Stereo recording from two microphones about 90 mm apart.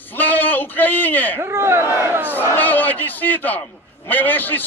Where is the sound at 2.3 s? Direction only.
20° left (ahead or behind).